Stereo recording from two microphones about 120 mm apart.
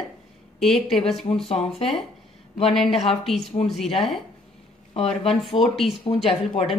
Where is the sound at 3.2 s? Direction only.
Centre (ahead or behind).